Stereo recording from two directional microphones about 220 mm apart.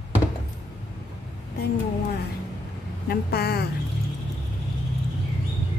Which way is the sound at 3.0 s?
45° left (ahead or behind).